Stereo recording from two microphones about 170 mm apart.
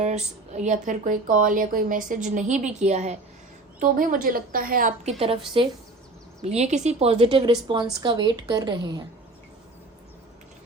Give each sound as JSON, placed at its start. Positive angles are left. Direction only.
{"t": 0.0, "sound": "a woman's voice", "side_deg": -40}
{"t": 3.8, "sound": "a woman's voice", "side_deg": -55}
{"t": 5.6, "sound": "a woman's voice", "side_deg": -30}
{"t": 6.6, "sound": "a woman's voice", "side_deg": -45}